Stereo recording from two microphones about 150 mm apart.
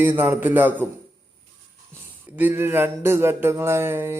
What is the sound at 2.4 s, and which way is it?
Speech, 15° right (ahead or behind).